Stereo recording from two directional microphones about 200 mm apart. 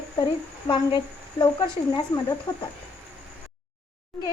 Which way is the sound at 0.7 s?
25° left (ahead or behind).